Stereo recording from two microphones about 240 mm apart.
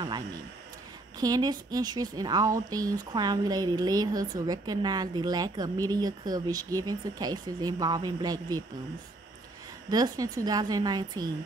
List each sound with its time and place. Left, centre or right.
1.2 s a woman's voice: centre
9.8 s a woman's voice: centre